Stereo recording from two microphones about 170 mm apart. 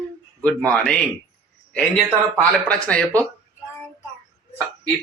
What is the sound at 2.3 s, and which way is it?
Speech, 5° left (ahead or behind).